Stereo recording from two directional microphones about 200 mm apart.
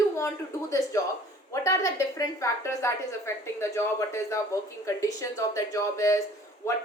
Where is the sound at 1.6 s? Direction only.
15° left (ahead or behind).